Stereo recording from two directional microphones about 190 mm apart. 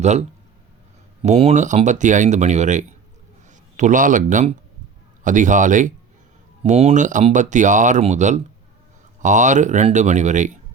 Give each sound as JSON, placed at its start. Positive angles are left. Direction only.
{"t": 0.0, "sound": "a man's voice", "side_deg": -35}